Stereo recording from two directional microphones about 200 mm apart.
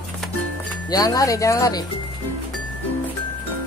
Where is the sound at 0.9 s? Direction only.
20° left (ahead or behind).